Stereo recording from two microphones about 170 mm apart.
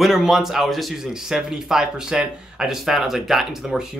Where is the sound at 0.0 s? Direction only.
Centre (ahead or behind).